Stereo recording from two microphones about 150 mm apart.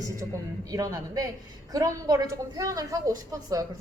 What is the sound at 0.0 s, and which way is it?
A woman's voice, 25° right (ahead or behind).